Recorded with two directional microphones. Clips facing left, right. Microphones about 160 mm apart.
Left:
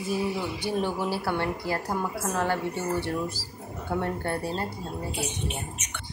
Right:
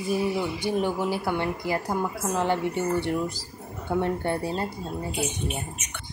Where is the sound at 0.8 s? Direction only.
15° right (ahead or behind).